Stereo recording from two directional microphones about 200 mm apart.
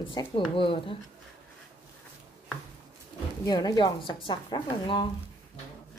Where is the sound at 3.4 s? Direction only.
20° left (ahead or behind).